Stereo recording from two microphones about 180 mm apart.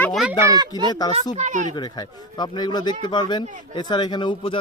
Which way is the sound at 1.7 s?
25° left (ahead or behind).